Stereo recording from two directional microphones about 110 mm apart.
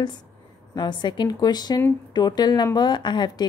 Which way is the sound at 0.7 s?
45° left (ahead or behind).